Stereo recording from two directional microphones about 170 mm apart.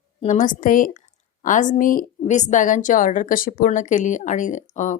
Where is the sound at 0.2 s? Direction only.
45° left (ahead or behind).